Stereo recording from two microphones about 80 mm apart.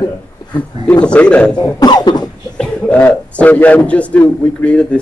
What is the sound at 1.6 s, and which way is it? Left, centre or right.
Speech, left.